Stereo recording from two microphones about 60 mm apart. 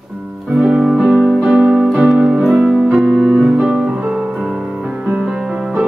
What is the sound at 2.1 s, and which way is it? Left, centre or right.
Piano, centre.